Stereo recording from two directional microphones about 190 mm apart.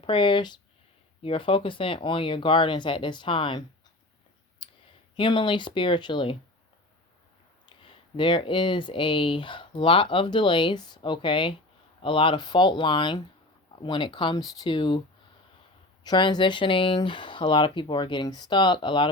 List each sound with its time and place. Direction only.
0.0 s speech: 25° left (ahead or behind)
4.6 s clicking: 25° left (ahead or behind)
5.1 s speech: 25° left (ahead or behind)
7.8 s speech: 25° left (ahead or behind)
16.0 s speech: 25° left (ahead or behind)